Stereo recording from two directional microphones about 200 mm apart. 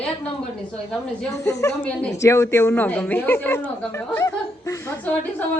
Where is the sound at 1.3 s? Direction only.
15° left (ahead or behind).